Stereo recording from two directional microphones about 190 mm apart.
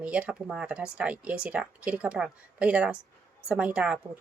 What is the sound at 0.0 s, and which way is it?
Speech, 5° right (ahead or behind).